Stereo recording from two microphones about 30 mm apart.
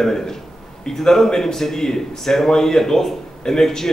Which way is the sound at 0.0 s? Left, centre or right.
Centre.